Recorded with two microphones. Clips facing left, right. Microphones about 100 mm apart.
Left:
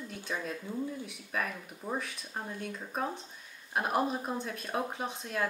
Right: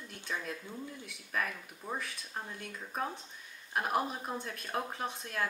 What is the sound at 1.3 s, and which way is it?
Speech, 10° left (ahead or behind).